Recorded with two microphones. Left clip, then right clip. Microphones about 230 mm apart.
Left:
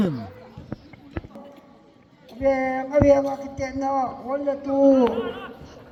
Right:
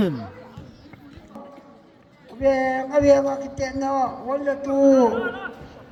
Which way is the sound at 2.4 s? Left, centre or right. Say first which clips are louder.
Right 2 dB; centre.